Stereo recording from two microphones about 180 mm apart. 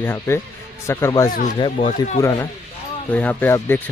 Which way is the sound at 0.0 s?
10° left (ahead or behind).